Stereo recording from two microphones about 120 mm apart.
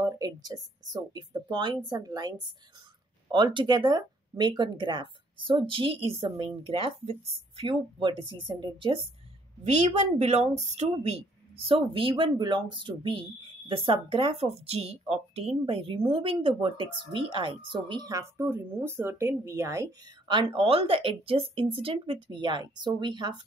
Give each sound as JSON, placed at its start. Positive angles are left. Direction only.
{"t": 0.0, "sound": "a sound", "side_deg": -30}
{"t": 1.1, "sound": "speech", "side_deg": -40}
{"t": 9.6, "sound": "speech", "side_deg": -70}